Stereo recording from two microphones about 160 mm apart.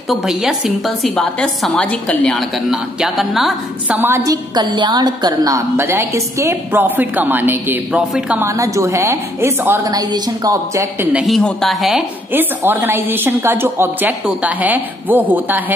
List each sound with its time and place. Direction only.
0.1 s a woman's voice: centre (ahead or behind)
4.0 s a woman's voice: 20° right (ahead or behind)
8.0 s a woman's voice: centre (ahead or behind)
8.4 s a woman's voice: 20° right (ahead or behind)
11.1 s a woman's voice: centre (ahead or behind)
12.3 s a woman's voice: 15° right (ahead or behind)